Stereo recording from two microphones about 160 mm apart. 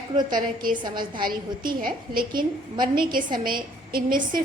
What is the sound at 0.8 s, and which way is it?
Speech, 30° right (ahead or behind).